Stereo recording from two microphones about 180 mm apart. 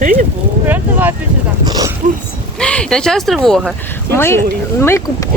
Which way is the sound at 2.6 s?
5° left (ahead or behind).